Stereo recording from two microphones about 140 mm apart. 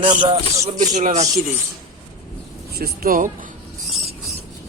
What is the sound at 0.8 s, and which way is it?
Speech, 60° right (ahead or behind).